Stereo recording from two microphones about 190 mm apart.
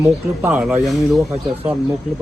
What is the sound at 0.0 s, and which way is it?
Speech, 10° right (ahead or behind).